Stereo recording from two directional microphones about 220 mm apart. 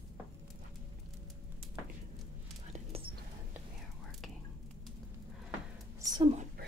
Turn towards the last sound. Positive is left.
turn(degrees=-20)  # may be behind; listen again after turning